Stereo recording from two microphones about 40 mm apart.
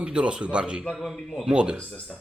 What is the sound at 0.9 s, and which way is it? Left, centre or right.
Speech, centre.